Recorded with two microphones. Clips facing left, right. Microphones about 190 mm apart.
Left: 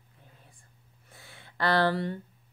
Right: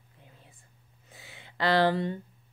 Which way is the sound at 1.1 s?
20° right (ahead or behind).